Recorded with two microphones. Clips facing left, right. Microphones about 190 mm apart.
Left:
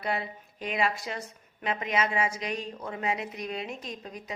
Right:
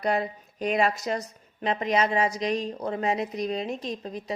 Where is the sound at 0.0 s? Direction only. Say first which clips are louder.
Right 6 dB; 45° right (ahead or behind).